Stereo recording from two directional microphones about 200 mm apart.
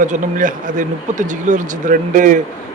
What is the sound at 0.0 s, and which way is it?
Speech, 40° right (ahead or behind).